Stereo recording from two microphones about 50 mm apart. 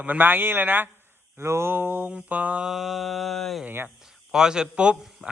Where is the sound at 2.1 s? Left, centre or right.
Right.